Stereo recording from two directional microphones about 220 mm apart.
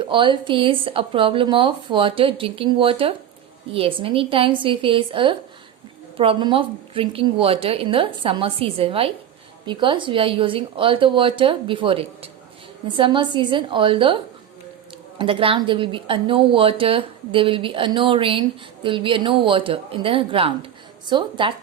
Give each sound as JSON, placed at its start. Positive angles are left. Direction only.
{"t": 0.0, "sound": "a woman's voice", "side_deg": -20}
{"t": 15.2, "sound": "a woman's voice", "side_deg": -25}